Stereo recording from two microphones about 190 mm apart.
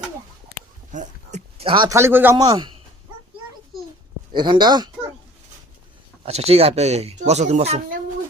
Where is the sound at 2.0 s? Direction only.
10° right (ahead or behind).